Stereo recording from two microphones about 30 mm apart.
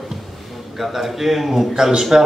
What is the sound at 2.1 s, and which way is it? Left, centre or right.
Speech, right.